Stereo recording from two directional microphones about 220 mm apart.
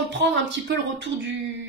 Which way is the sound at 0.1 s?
55° right (ahead or behind).